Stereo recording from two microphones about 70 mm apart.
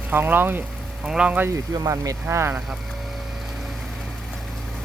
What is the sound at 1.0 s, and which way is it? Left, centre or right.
Speech, centre.